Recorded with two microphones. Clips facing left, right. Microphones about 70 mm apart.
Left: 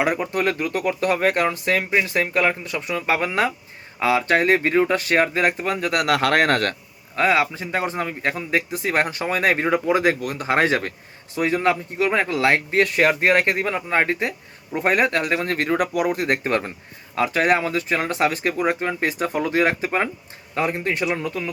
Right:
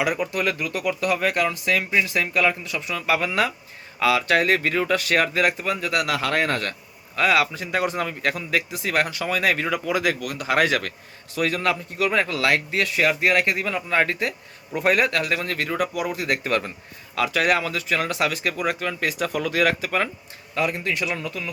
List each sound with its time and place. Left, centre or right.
0.0 s a man's voice: left
7.2 s a man's voice: left